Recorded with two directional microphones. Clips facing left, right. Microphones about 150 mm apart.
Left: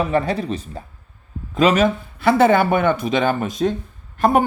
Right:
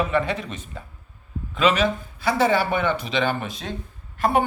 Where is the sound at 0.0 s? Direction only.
35° left (ahead or behind).